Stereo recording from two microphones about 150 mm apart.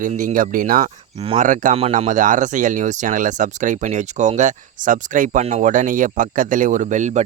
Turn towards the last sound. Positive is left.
turn(degrees=-55)  # may be behind; listen again after turning